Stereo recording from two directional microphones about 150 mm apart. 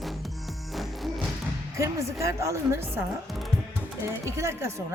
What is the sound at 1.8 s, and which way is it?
A woman's voice, 20° right (ahead or behind).